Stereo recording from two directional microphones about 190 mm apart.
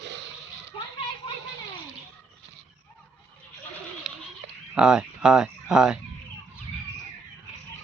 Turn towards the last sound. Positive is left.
turn(degrees=-5)  # may be behind; listen again after turning